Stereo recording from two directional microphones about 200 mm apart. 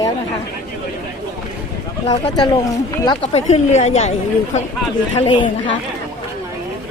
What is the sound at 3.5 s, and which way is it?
Speech, 35° left (ahead or behind).